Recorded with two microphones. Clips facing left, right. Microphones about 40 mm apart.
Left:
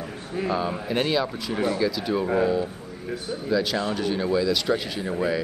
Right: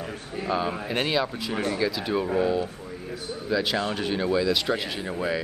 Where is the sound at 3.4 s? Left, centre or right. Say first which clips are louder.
Left 1 dB; centre.